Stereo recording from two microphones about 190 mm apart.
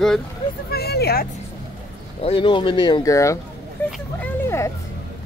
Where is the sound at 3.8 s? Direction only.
5° left (ahead or behind).